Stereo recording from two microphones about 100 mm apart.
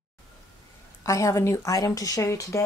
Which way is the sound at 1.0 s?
30° left (ahead or behind).